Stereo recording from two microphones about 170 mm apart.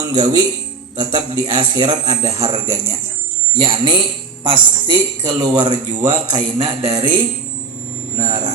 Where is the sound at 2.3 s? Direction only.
35° right (ahead or behind).